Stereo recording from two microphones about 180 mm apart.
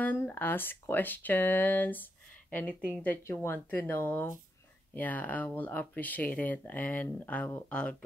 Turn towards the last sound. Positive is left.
turn(degrees=10)  # may be behind; listen again after turning